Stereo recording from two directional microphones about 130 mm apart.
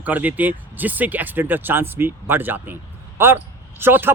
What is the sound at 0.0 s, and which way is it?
A man's voice, 10° right (ahead or behind).